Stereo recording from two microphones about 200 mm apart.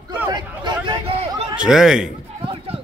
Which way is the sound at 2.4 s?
25° right (ahead or behind).